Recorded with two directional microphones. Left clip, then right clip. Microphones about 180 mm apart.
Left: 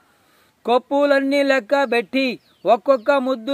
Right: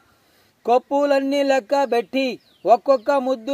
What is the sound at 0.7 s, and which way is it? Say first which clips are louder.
Speech: left 1 dB; 20° left (ahead or behind).